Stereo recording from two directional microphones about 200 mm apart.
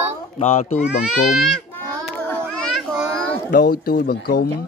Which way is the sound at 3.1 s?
5° left (ahead or behind).